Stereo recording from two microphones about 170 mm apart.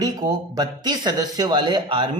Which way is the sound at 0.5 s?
25° right (ahead or behind).